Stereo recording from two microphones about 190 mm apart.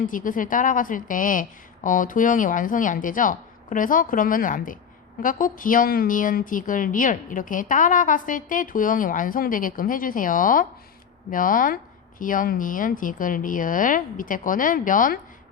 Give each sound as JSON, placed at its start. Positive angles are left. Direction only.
{"t": 0.1, "sound": "a woman's voice", "side_deg": 45}